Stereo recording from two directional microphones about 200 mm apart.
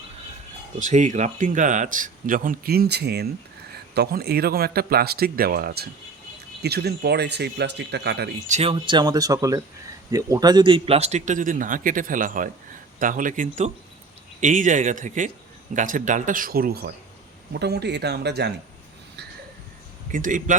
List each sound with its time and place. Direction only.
0.8 s a man's voice: 35° right (ahead or behind); by 8.3 s 55° right (ahead or behind)
8.4 s a man's voice: 30° right (ahead or behind); by 18.5 s 55° right (ahead or behind)
20.1 s a man's voice: 40° right (ahead or behind)